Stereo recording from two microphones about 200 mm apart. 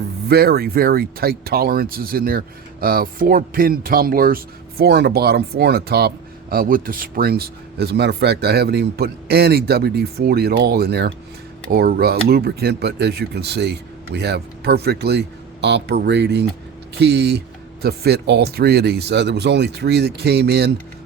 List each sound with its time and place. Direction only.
0.3 s speech: 50° right (ahead or behind)